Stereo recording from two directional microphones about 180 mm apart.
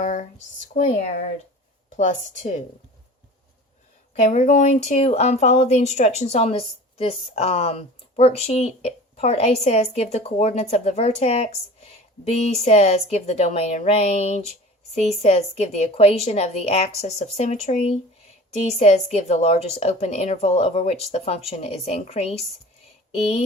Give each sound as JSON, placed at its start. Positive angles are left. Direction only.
{"t": 0.0, "sound": "speech", "side_deg": 40}
{"t": 2.0, "sound": "speech", "side_deg": 45}
{"t": 4.2, "sound": "speech", "side_deg": 40}